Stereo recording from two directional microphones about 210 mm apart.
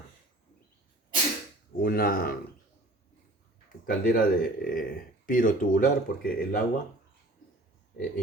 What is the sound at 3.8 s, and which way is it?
Speech, 40° left (ahead or behind).